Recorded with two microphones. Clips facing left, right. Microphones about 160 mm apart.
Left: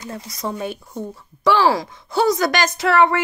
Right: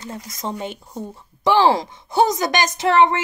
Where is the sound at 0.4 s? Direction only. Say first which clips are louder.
Left 2 dB; 25° right (ahead or behind).